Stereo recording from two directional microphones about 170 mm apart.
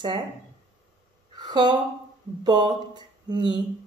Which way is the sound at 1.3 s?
25° right (ahead or behind).